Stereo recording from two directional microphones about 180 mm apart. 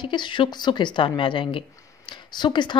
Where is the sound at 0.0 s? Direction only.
25° left (ahead or behind).